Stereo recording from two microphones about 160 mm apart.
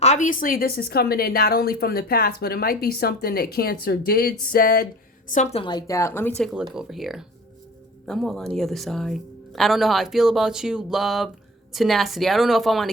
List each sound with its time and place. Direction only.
0.0 s a woman's voice: 45° left (ahead or behind); by 4.9 s 65° left (ahead or behind)
5.3 s a woman's voice: 45° left (ahead or behind)
5.6 s speech: 25° left (ahead or behind)
6.4 s speech: 5° right (ahead or behind)